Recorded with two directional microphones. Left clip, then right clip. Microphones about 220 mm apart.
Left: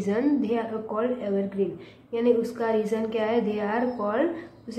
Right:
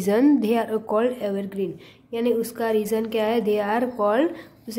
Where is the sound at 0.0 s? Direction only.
45° right (ahead or behind).